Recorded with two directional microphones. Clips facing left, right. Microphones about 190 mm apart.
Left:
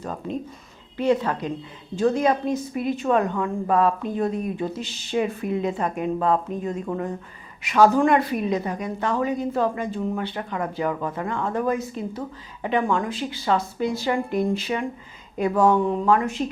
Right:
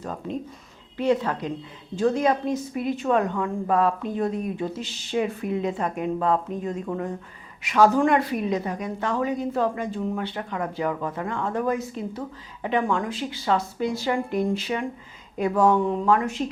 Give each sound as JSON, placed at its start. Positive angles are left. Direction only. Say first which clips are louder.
{"t": 0.9, "sound": "a woman's voice", "louder": "left 1 dB", "side_deg": 10}
{"t": 4.8, "sound": "a woman's voice", "louder": "left 1 dB", "side_deg": 10}